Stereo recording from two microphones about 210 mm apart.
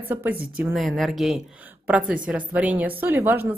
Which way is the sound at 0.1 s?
10° right (ahead or behind).